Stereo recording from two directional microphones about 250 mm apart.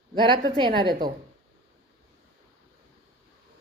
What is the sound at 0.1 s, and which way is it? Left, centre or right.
Speech, centre.